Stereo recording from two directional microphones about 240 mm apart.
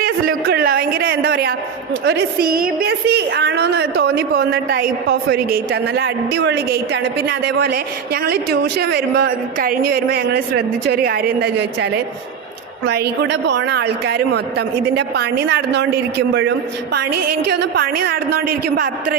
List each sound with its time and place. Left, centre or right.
0.0 s a man's voice: right